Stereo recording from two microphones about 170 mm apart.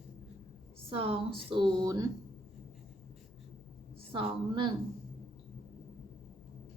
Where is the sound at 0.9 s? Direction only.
30° right (ahead or behind).